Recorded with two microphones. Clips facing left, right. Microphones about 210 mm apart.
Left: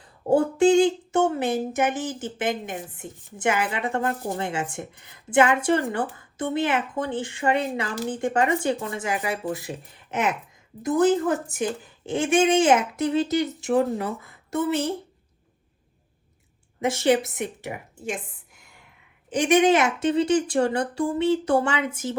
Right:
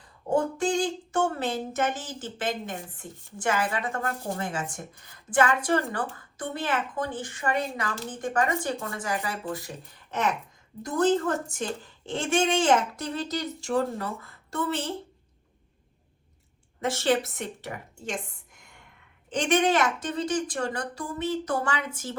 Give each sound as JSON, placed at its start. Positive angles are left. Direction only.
{"t": 0.3, "sound": "a woman's voice", "side_deg": 30}
{"t": 10.9, "sound": "speech", "side_deg": 10}
{"t": 12.3, "sound": "a woman's voice", "side_deg": 20}
{"t": 16.8, "sound": "a woman's voice", "side_deg": 15}